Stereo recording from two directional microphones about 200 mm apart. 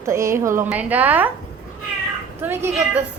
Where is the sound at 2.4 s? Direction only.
10° right (ahead or behind).